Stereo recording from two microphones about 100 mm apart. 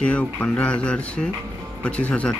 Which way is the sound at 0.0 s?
15° left (ahead or behind).